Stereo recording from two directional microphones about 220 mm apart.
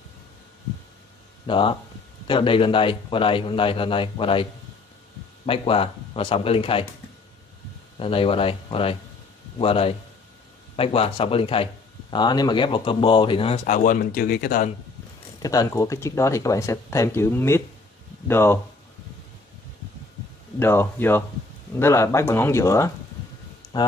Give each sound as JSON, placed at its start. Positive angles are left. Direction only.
{"t": 1.5, "sound": "speech", "side_deg": 25}
{"t": 5.5, "sound": "speech", "side_deg": 25}
{"t": 8.0, "sound": "speech", "side_deg": 25}
{"t": 15.4, "sound": "speech", "side_deg": 15}
{"t": 20.5, "sound": "speech", "side_deg": 10}
{"t": 23.6, "sound": "a sound", "side_deg": 20}